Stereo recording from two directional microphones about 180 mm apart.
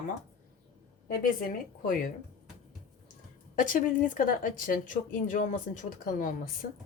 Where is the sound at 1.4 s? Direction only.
50° left (ahead or behind).